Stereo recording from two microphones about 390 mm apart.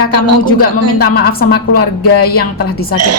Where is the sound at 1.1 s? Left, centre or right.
Left.